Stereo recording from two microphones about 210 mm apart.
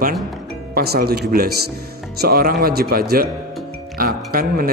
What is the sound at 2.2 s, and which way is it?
A man's voice, 45° right (ahead or behind).